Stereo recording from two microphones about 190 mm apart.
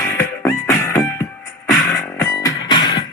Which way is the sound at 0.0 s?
15° left (ahead or behind).